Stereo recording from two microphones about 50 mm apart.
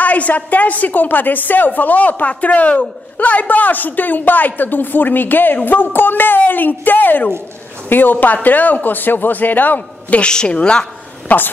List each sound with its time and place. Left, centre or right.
0.0 s a woman's voice: left
10.2 s a woman's voice: centre
11.2 s a woman's voice: left